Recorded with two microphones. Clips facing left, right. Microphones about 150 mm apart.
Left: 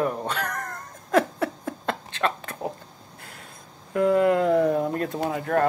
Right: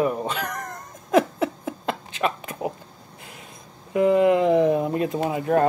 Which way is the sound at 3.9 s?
15° right (ahead or behind).